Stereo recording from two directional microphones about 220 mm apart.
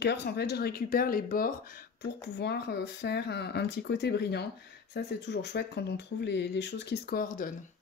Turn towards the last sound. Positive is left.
turn(degrees=40)  # may be behind; listen again after turning